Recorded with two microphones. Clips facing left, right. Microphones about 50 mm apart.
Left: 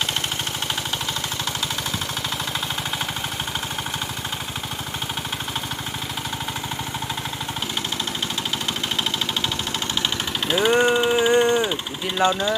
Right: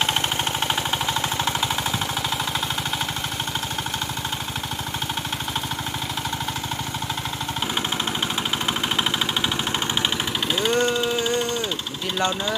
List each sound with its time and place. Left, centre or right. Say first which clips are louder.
10.7 s vehicle: left 4 dB; centre
12.1 s speech: left 4 dB; centre